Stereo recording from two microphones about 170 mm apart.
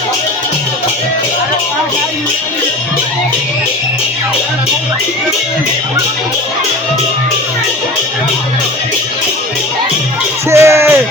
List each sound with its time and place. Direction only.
10.5 s music: 15° right (ahead or behind)